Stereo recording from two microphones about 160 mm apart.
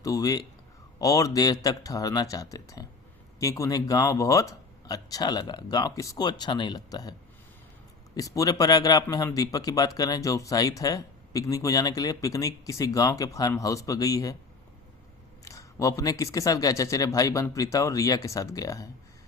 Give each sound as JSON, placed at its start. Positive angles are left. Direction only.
{"t": 0.0, "sound": "a man's voice", "side_deg": 20}
{"t": 15.4, "sound": "a man's voice", "side_deg": 20}